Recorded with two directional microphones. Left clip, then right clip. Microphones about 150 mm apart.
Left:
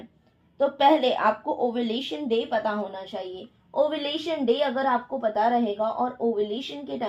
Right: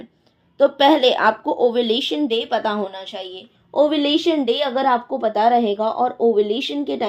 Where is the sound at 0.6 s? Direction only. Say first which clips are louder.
Right 6 dB; 35° right (ahead or behind).